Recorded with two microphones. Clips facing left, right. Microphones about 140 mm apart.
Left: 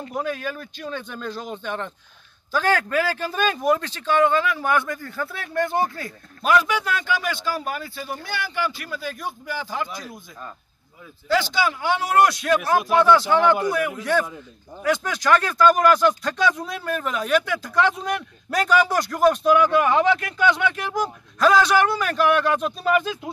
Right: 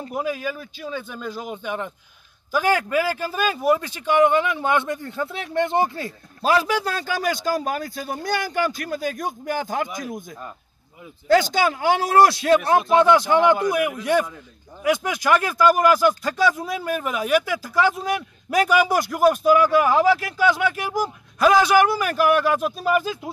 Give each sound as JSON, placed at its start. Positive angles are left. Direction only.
{"t": 0.1, "sound": "a man's voice", "side_deg": -5}
{"t": 9.8, "sound": "speech", "side_deg": -20}
{"t": 11.2, "sound": "speech", "side_deg": -45}
{"t": 12.9, "sound": "speech", "side_deg": -15}